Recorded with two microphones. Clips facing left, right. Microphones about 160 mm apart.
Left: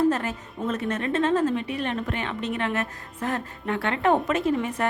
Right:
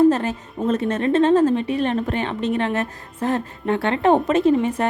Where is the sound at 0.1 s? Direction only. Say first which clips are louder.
Right 6 dB; 30° right (ahead or behind).